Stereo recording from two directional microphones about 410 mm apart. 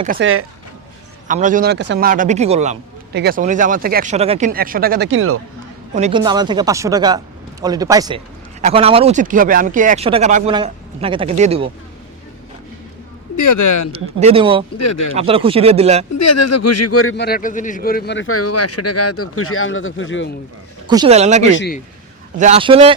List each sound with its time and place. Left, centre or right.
0.0 s a man's voice: right
5.9 s speech: centre
13.3 s speech: left
13.9 s speech: centre
14.8 s a man's voice: left
15.1 s speech: centre
16.1 s a man's voice: left
20.8 s speech: centre